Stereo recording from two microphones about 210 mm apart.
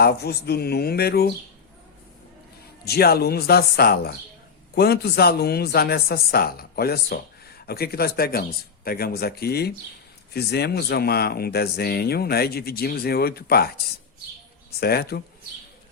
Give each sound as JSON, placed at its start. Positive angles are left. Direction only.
{"t": 0.0, "sound": "speech", "side_deg": 50}
{"t": 2.8, "sound": "speech", "side_deg": 50}
{"t": 14.8, "sound": "speech", "side_deg": 50}